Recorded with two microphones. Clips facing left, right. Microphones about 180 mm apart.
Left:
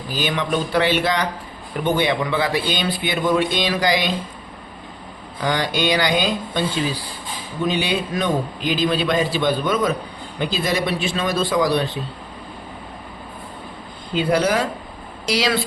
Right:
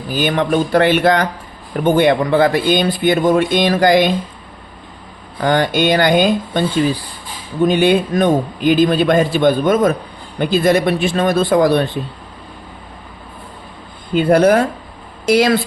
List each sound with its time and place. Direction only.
0.1 s a man's voice: 50° right (ahead or behind)
5.4 s a man's voice: 50° right (ahead or behind)
14.1 s a man's voice: 55° right (ahead or behind)